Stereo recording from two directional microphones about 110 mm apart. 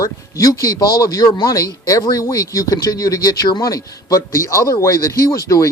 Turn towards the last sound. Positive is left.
turn(degrees=30)  # may be behind; listen again after turning